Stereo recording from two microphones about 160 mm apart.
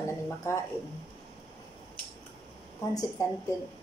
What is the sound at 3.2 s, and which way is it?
Speech, 20° left (ahead or behind).